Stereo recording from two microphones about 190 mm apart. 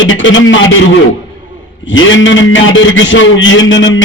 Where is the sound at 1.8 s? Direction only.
90° left.